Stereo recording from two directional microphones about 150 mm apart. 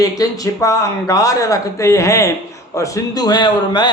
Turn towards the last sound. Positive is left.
turn(degrees=30)  # may be behind; listen again after turning